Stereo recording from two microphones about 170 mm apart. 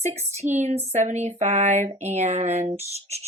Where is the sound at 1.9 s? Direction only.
40° right (ahead or behind).